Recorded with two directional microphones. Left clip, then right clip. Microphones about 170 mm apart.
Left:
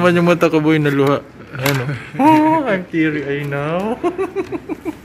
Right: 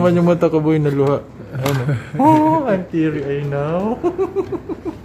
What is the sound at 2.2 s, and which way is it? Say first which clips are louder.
Speech: left 1 dB; centre (ahead or behind).